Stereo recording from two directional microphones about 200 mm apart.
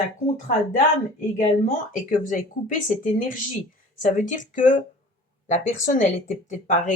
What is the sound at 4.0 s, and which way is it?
Speech, 40° left (ahead or behind).